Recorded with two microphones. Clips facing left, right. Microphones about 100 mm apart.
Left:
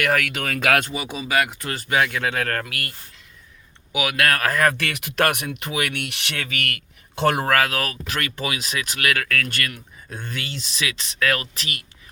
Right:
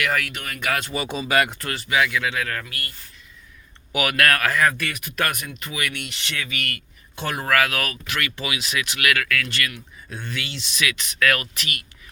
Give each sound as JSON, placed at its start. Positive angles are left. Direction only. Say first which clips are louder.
{"t": 0.0, "sound": "speech", "louder": "left 3 dB", "side_deg": 70}
{"t": 0.9, "sound": "speech", "louder": "right 1 dB", "side_deg": 10}
{"t": 1.7, "sound": "speech", "louder": "left 1 dB", "side_deg": 45}
{"t": 2.6, "sound": "speech", "louder": "left 3 dB", "side_deg": 85}
{"t": 3.9, "sound": "speech", "louder": "right 1 dB", "side_deg": 15}
{"t": 4.4, "sound": "speech", "louder": "left 1 dB", "side_deg": 45}
{"t": 4.7, "sound": "speech", "louder": "left 2 dB", "side_deg": 75}
{"t": 7.4, "sound": "speech", "louder": "left 1 dB", "side_deg": 35}